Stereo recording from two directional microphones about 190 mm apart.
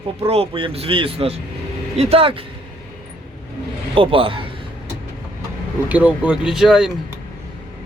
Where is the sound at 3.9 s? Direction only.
30° right (ahead or behind).